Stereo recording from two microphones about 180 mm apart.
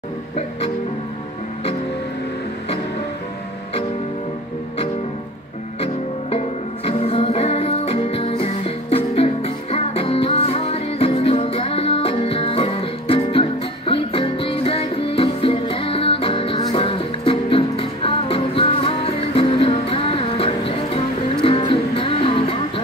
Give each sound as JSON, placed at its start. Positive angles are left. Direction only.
{"t": 6.9, "sound": "music", "side_deg": 35}